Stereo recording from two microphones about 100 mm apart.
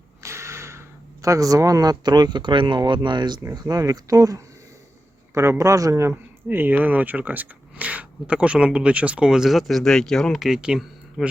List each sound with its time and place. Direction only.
0.2 s speech: 30° right (ahead or behind); by 11.3 s 10° right (ahead or behind)